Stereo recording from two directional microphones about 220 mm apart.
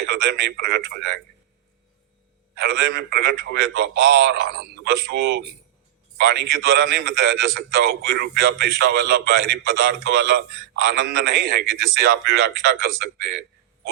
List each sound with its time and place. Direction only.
0.1 s a man's voice: 50° right (ahead or behind)
2.6 s a man's voice: 45° right (ahead or behind)